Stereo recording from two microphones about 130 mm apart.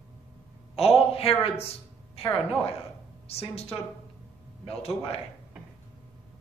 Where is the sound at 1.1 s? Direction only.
50° left (ahead or behind).